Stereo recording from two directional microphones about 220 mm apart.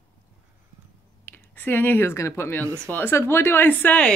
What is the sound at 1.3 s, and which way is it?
Speech, 10° left (ahead or behind).